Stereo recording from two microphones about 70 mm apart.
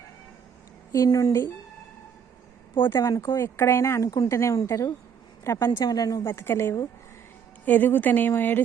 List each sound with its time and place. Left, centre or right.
0.9 s speech: left
3.0 s speech: left
3.3 s a woman's voice: left
5.8 s a woman's voice: left
6.2 s speech: left
7.6 s speech: left